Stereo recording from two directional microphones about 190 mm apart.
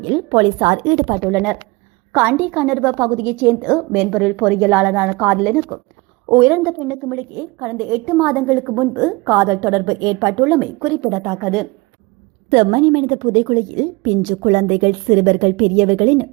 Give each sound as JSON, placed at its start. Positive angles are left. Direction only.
{"t": 0.0, "sound": "a woman's voice", "side_deg": -30}
{"t": 1.2, "sound": "a woman's voice", "side_deg": -10}
{"t": 11.3, "sound": "a woman's voice", "side_deg": 0}
{"t": 12.5, "sound": "a woman's voice", "side_deg": -35}